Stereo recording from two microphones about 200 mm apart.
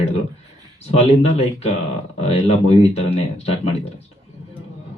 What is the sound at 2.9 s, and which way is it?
Speech, 30° left (ahead or behind).